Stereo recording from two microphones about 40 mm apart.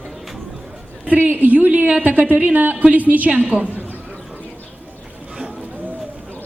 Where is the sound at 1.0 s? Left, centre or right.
Right.